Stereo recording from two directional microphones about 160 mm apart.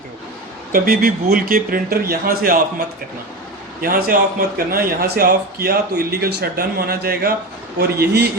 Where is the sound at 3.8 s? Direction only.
65° right (ahead or behind).